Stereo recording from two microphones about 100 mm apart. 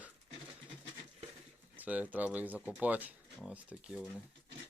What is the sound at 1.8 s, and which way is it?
Speech, 15° right (ahead or behind).